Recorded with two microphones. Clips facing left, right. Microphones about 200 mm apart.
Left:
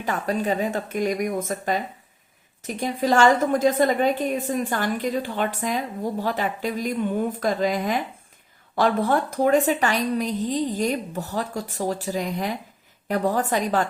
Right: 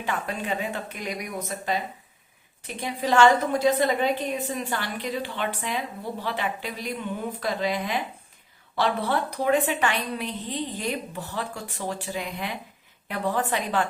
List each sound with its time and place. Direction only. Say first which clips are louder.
0.0 s a woman's voice: left 5 dB; 40° left (ahead or behind)